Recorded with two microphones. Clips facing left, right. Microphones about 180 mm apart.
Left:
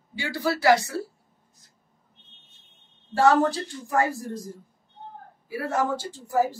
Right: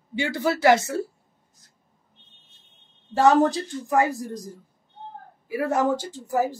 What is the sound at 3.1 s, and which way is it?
A woman's voice, 20° right (ahead or behind).